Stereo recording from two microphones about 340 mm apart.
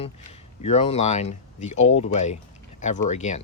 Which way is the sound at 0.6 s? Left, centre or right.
Centre.